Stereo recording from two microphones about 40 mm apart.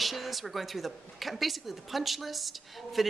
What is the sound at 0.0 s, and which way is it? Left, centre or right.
A woman's voice, centre.